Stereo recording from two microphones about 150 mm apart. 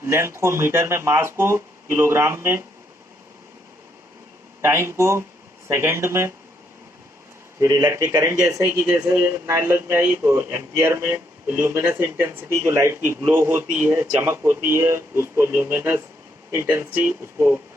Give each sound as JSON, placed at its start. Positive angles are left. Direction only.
{"t": 0.0, "sound": "speech", "side_deg": -20}
{"t": 4.6, "sound": "speech", "side_deg": -20}
{"t": 7.6, "sound": "speech", "side_deg": -25}